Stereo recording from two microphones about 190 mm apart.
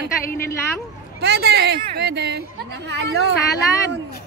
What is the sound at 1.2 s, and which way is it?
A woman's voice, 60° right (ahead or behind).